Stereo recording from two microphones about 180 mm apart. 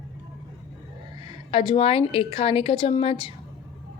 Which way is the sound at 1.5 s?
25° left (ahead or behind).